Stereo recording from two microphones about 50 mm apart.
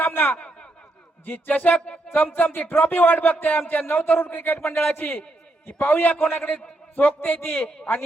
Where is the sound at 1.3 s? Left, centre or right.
Left.